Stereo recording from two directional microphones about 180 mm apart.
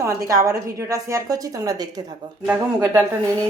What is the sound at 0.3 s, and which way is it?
A woman's voice, 15° right (ahead or behind).